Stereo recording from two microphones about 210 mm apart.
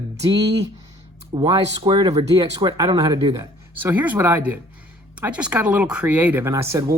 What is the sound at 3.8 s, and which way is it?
Speech, 10° right (ahead or behind).